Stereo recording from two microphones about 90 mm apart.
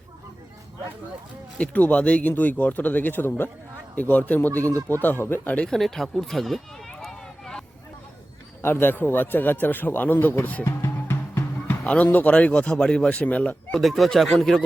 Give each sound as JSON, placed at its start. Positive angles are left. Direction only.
{"t": 1.5, "sound": "speech", "side_deg": 15}
{"t": 4.6, "sound": "speech", "side_deg": -40}
{"t": 4.9, "sound": "speech", "side_deg": 20}
{"t": 5.6, "sound": "a sound", "side_deg": 5}
{"t": 8.6, "sound": "speech", "side_deg": 25}
{"t": 11.7, "sound": "speech", "side_deg": 15}
{"t": 13.7, "sound": "speech", "side_deg": 0}